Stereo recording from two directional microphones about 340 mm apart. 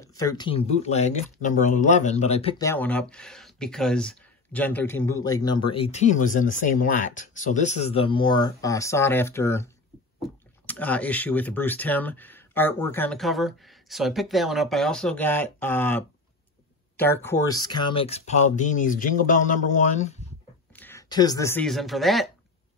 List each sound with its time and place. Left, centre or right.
0.4 s speech: centre
20.7 s speech: centre